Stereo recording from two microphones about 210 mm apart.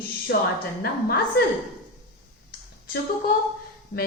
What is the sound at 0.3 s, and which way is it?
A woman's voice, 55° left (ahead or behind).